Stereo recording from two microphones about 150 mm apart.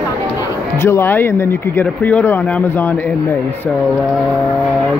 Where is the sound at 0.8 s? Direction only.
15° left (ahead or behind).